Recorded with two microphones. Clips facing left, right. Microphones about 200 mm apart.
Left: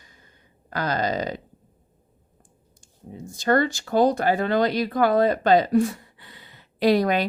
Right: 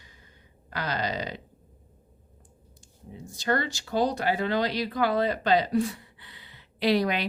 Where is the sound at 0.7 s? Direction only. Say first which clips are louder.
Left 6 dB; 45° left (ahead or behind).